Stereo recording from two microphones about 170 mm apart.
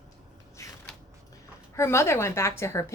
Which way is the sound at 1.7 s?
15° left (ahead or behind).